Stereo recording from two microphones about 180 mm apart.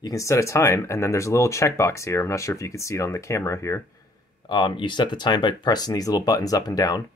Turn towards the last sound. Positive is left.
turn(degrees=20)  # may be behind; listen again after turning